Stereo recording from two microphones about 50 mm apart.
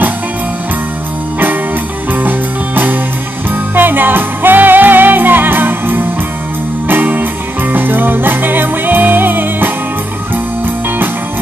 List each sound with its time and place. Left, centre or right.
2.1 s music: right